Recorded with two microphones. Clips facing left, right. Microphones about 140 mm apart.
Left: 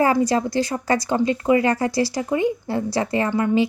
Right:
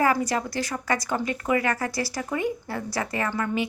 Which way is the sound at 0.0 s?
25° left (ahead or behind).